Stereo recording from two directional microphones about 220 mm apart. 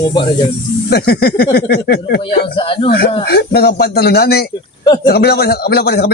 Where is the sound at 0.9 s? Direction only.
45° left (ahead or behind).